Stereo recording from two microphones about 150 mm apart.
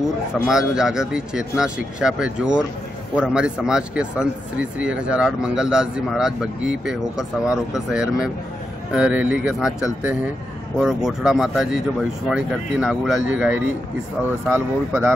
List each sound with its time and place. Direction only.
0.5 s speech: 5° right (ahead or behind)
10.8 s speech: 5° right (ahead or behind)